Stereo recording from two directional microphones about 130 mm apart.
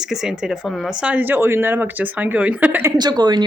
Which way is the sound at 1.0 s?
15° right (ahead or behind).